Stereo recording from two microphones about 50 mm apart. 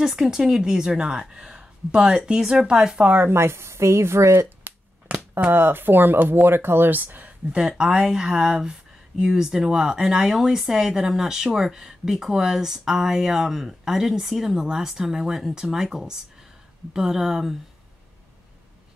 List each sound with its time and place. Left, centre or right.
0.0 s speech: centre
3.0 s speech: right
3.3 s a woman's voice: right
4.6 s a sound: right
5.5 s speech: right
7.5 s speech: centre